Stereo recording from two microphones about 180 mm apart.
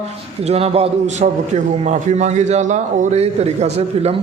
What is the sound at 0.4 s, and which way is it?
A man's voice, 35° right (ahead or behind).